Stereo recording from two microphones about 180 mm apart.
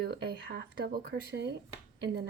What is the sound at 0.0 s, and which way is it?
A woman's voice, 60° right (ahead or behind).